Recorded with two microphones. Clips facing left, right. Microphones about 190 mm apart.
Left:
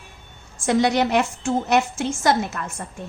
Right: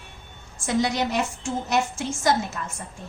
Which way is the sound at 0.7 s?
65° left (ahead or behind).